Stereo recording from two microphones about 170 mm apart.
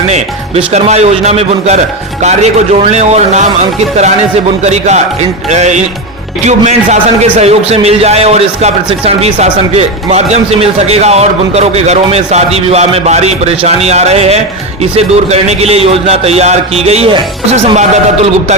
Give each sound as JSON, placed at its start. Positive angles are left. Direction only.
{"t": 0.1, "sound": "a man's voice", "side_deg": -40}
{"t": 2.9, "sound": "a man's voice", "side_deg": -40}
{"t": 4.6, "sound": "a man's voice", "side_deg": -40}
{"t": 5.5, "sound": "music", "side_deg": -45}
{"t": 6.4, "sound": "a man's voice", "side_deg": -45}